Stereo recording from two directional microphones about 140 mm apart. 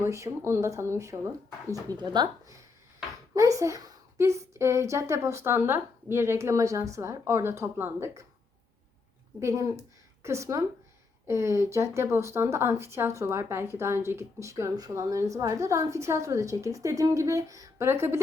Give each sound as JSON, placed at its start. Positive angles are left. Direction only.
{"t": 0.0, "sound": "speech", "side_deg": -20}
{"t": 9.4, "sound": "speech", "side_deg": -20}